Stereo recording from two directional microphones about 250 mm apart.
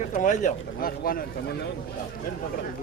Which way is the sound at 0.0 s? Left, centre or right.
Left.